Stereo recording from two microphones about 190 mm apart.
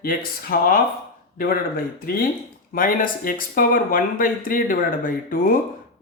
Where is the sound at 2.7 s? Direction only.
45° left (ahead or behind).